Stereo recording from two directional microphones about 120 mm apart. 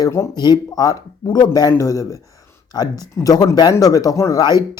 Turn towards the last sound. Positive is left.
turn(degrees=30)  # may be behind; listen again after turning